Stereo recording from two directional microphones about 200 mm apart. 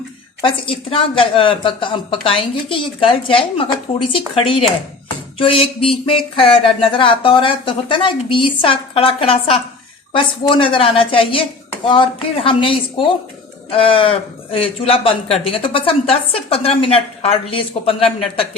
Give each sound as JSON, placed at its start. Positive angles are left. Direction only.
{"t": 0.4, "sound": "speech", "side_deg": 25}